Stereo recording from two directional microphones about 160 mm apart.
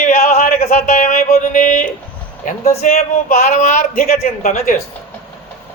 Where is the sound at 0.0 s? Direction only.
65° left (ahead or behind).